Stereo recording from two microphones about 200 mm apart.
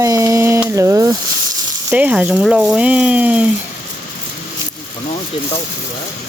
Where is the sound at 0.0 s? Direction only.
15° right (ahead or behind).